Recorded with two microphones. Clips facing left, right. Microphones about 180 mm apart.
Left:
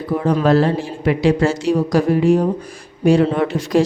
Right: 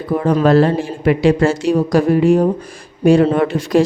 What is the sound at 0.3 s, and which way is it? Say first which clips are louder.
A woman's voice: right 3 dB; 55° right (ahead or behind).